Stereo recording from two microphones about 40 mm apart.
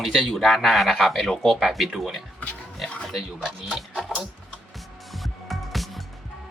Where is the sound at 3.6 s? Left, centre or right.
Centre.